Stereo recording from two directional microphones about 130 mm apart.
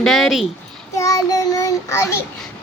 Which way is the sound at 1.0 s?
25° left (ahead or behind).